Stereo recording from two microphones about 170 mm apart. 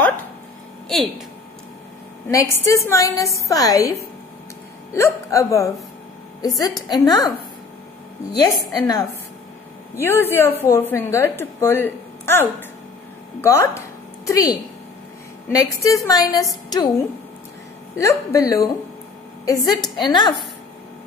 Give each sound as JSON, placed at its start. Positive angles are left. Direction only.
{"t": 0.8, "sound": "speech", "side_deg": 0}
{"t": 2.2, "sound": "a woman's voice", "side_deg": 15}
{"t": 8.4, "sound": "a woman's voice", "side_deg": 25}
{"t": 10.0, "sound": "a woman's voice", "side_deg": 15}
{"t": 17.9, "sound": "a woman's voice", "side_deg": 20}